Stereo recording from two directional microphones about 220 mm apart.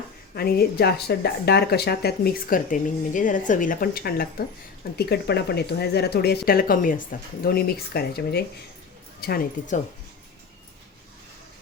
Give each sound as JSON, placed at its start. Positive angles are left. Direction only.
{"t": 0.3, "sound": "speech", "side_deg": 45}